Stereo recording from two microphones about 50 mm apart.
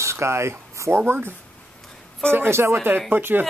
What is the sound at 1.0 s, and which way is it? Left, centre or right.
Speech, right.